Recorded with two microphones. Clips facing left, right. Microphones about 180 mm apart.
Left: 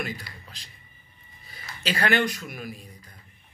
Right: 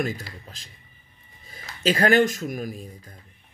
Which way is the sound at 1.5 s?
40° right (ahead or behind).